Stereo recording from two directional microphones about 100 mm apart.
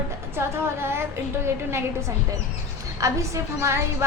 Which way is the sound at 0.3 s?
25° right (ahead or behind).